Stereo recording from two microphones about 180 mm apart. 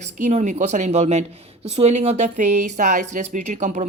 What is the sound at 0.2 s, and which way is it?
Speech, 40° right (ahead or behind).